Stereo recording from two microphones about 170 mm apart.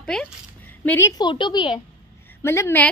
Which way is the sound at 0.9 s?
15° left (ahead or behind).